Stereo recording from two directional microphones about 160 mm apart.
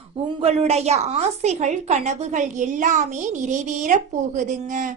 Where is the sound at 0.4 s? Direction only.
40° right (ahead or behind).